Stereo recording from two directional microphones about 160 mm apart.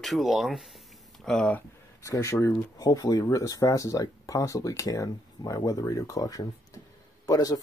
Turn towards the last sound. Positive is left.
turn(degrees=20)  # may be behind; listen again after turning